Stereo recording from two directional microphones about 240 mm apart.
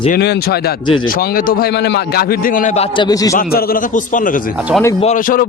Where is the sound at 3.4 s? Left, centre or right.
Left.